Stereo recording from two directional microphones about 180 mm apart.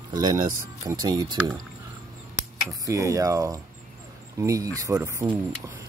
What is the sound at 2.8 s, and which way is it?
Speech, 20° right (ahead or behind).